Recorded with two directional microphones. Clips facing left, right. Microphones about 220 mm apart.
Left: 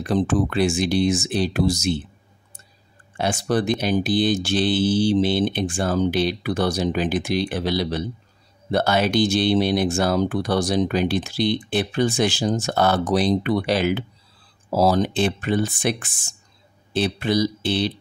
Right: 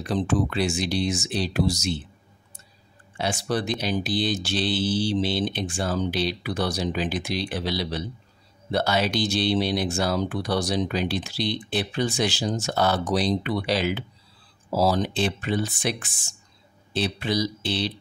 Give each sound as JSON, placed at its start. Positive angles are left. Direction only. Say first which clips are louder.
{"t": 0.0, "sound": "speech", "louder": "left 4 dB", "side_deg": 50}
{"t": 3.2, "sound": "speech", "louder": "left 5 dB", "side_deg": 50}